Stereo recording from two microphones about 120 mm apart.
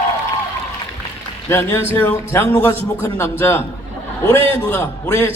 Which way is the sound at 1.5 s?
20° left (ahead or behind).